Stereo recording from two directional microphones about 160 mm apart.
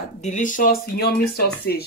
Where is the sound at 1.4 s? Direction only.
80° left.